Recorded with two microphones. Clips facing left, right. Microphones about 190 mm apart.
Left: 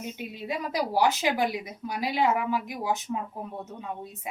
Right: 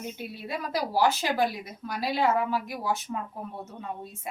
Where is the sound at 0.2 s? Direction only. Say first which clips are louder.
Left 2 dB; 15° left (ahead or behind).